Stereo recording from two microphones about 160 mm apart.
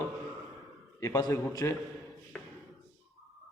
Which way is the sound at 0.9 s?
20° left (ahead or behind).